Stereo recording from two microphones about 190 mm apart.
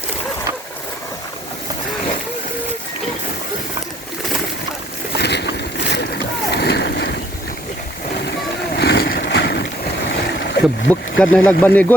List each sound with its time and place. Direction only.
5.1 s boat: 60° left (ahead or behind)
8.3 s vehicle: 60° left (ahead or behind)
10.1 s boat: 65° left (ahead or behind)
11.2 s speech: 5° left (ahead or behind)